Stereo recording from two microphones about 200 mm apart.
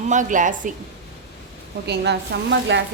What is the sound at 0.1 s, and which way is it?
Speech, 40° right (ahead or behind).